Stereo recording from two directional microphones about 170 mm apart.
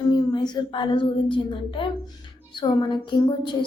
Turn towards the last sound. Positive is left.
turn(degrees=30)  # may be behind; listen again after turning